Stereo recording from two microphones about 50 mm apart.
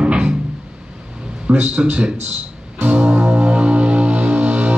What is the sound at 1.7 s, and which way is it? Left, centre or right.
Speech, right.